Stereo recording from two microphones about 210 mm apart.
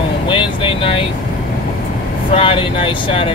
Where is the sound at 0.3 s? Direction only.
25° left (ahead or behind).